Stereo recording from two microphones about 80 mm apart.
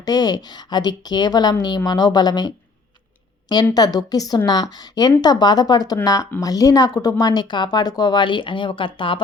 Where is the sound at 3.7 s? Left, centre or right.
Left.